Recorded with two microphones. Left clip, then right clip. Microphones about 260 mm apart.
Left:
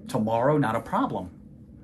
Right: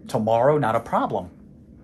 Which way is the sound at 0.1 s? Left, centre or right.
Right.